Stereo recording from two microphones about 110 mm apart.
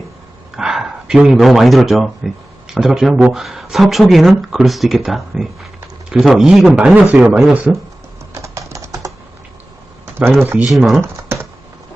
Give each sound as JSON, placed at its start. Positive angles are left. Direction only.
{"t": 0.5, "sound": "speech", "side_deg": -5}
{"t": 8.3, "sound": "typing", "side_deg": -30}
{"t": 10.2, "sound": "speech", "side_deg": -20}
{"t": 10.7, "sound": "speech", "side_deg": 0}
{"t": 11.0, "sound": "typing", "side_deg": -20}